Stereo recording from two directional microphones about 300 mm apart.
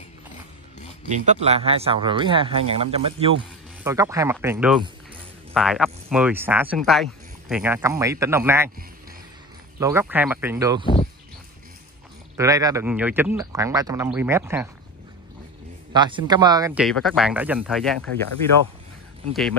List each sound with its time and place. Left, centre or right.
1.1 s speech: right
9.8 s speech: centre
12.4 s speech: centre
15.9 s speech: centre